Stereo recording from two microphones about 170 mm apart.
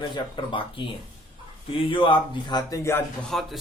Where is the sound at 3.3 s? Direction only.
Centre (ahead or behind).